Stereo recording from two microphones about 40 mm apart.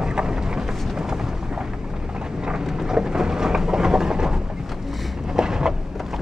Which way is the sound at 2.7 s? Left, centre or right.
Centre.